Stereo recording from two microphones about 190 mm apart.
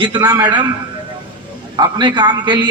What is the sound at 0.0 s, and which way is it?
Speech, 20° right (ahead or behind).